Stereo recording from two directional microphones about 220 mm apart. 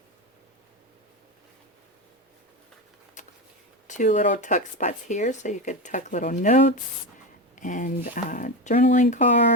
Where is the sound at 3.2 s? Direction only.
35° left (ahead or behind).